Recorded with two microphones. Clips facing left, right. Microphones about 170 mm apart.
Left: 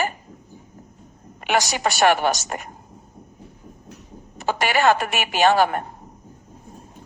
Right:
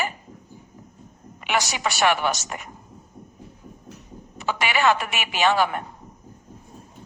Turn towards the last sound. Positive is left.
turn(degrees=45)  # may be behind; listen again after turning